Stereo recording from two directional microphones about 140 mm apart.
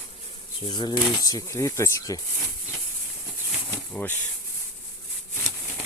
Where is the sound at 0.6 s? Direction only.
30° left (ahead or behind).